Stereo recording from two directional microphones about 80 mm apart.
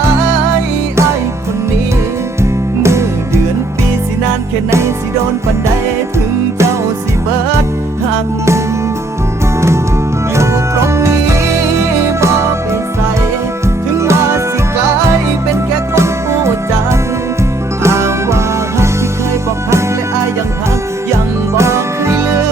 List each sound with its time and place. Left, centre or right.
2.4 s music: right
10.3 s music: right
14.0 s music: right
16.0 s music: right
17.8 s music: right
21.5 s music: right